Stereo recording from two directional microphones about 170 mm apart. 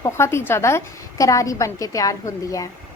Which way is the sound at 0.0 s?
15° left (ahead or behind).